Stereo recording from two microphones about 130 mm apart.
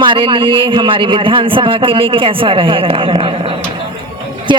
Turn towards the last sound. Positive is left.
turn(degrees=-45)  # may be behind; listen again after turning